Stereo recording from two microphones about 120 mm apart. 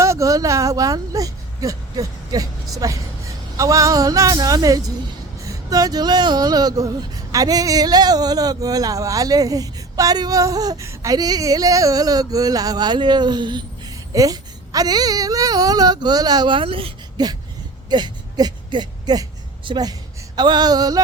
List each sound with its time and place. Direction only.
0.0 s speech: 25° right (ahead or behind); by 16.9 s 50° right (ahead or behind)
17.2 s a woman's voice: 35° right (ahead or behind)